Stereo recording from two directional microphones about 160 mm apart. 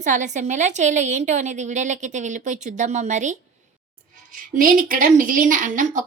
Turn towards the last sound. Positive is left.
turn(degrees=-50)  # may be behind; listen again after turning